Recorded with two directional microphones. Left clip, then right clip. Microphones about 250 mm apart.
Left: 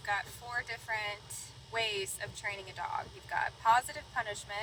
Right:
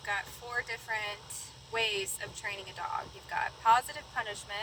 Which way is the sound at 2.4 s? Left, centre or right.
Right.